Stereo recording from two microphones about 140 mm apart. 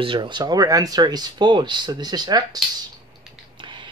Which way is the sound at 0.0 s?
35° right (ahead or behind).